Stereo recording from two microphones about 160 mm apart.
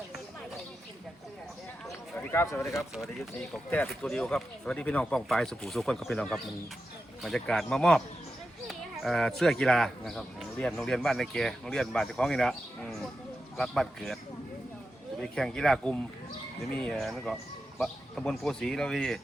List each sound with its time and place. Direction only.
1.9 s a sound: 15° left (ahead or behind)
2.9 s speech: centre (ahead or behind)
15.2 s speech: 5° left (ahead or behind)